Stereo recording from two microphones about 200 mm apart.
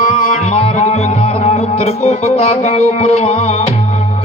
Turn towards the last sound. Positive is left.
turn(degrees=30)  # may be behind; listen again after turning